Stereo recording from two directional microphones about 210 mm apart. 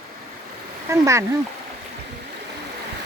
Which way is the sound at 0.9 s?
15° right (ahead or behind).